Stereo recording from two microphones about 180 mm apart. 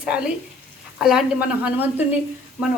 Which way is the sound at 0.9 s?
5° right (ahead or behind).